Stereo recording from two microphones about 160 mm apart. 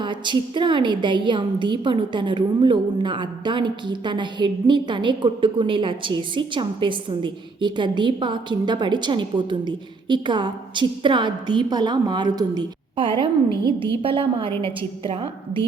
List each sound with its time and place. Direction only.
0.0 s a woman's voice: 30° right (ahead or behind)